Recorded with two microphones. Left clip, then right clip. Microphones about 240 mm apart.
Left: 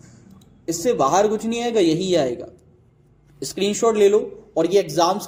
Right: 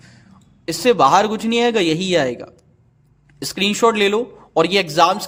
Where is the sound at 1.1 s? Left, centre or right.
Right.